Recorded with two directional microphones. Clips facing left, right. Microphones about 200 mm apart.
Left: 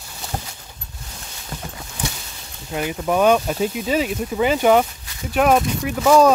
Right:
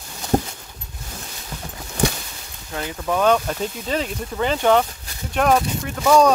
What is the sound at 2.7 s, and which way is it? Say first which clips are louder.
Speech: left 3 dB; 15° left (ahead or behind).